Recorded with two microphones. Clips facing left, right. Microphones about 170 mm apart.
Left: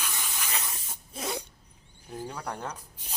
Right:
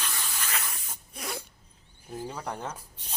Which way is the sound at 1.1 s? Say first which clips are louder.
Left 4 dB; 20° left (ahead or behind).